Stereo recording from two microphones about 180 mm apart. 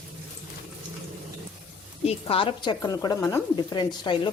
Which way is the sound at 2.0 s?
30° left (ahead or behind).